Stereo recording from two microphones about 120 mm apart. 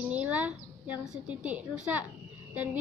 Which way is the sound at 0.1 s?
10° right (ahead or behind).